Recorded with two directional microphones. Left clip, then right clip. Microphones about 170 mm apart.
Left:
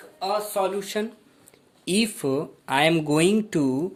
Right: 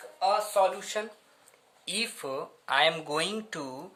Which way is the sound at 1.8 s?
50° left (ahead or behind).